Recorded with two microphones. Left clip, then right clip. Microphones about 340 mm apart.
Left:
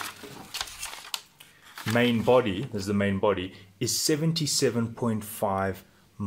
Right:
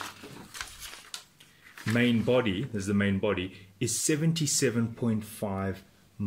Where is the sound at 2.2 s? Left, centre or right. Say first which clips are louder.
Left 4 dB; centre.